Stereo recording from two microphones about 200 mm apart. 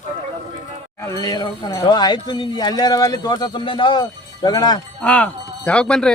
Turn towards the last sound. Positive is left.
turn(degrees=5)  # may be behind; listen again after turning